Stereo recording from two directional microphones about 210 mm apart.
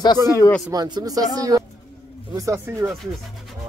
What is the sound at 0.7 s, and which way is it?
A man's voice, 20° right (ahead or behind).